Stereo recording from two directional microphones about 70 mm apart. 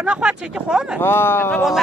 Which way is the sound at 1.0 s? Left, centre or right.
Left.